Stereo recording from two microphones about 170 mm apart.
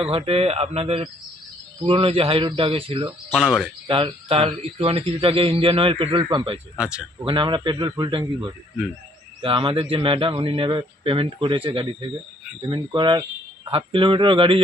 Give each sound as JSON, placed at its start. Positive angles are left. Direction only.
{"t": 0.0, "sound": "speech", "side_deg": -35}
{"t": 3.3, "sound": "speech", "side_deg": 0}
{"t": 3.8, "sound": "speech", "side_deg": -30}
{"t": 6.7, "sound": "speech", "side_deg": -5}
{"t": 7.3, "sound": "a man's voice", "side_deg": -30}